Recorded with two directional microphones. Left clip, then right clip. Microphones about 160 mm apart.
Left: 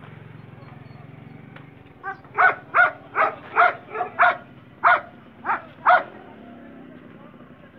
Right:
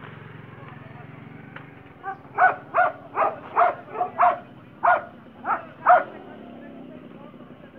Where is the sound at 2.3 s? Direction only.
60° right (ahead or behind).